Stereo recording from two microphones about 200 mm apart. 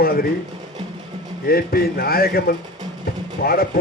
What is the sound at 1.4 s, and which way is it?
A man's voice, 50° left (ahead or behind).